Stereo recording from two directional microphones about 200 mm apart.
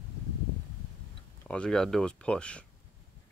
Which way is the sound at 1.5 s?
5° left (ahead or behind).